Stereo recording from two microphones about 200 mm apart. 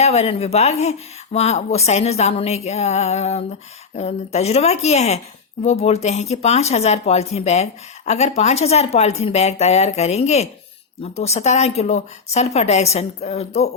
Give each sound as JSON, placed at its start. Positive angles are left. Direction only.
{"t": 0.0, "sound": "speech", "side_deg": 30}